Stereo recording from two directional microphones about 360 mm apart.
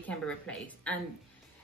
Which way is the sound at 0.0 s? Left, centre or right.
Centre.